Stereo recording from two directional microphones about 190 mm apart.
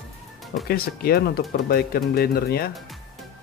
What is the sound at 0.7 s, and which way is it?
Speech, 50° left (ahead or behind).